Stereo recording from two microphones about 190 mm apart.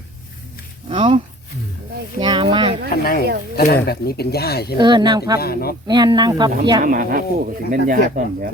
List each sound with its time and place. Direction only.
0.9 s speech: 25° right (ahead or behind)
2.2 s speech: 25° right (ahead or behind)
3.0 s a man's voice: 50° left (ahead or behind)
4.8 s speech: 25° right (ahead or behind)
5.4 s a man's voice: 55° left (ahead or behind)
5.9 s speech: 20° right (ahead or behind)
6.8 s speech: 45° right (ahead or behind)